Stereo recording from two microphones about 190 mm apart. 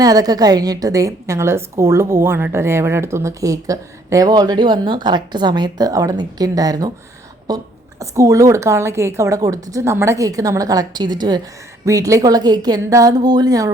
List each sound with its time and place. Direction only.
0.0 s a woman's voice: 20° right (ahead or behind)